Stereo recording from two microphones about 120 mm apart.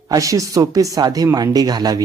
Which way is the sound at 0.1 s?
25° right (ahead or behind).